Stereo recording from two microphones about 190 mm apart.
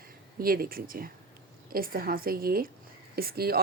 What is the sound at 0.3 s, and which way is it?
Speech, 50° right (ahead or behind).